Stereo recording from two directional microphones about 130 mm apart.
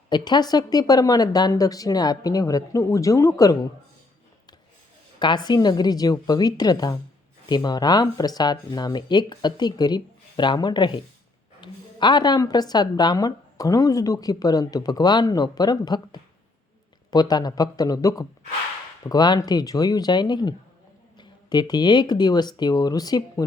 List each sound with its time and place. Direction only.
0.1 s a woman's voice: 35° left (ahead or behind)
5.2 s a woman's voice: 35° left (ahead or behind)